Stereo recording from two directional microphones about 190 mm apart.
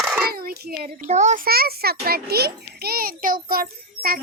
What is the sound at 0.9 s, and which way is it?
A child's voice, 40° right (ahead or behind).